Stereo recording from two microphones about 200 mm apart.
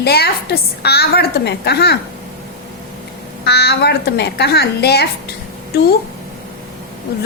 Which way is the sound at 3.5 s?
55° left (ahead or behind).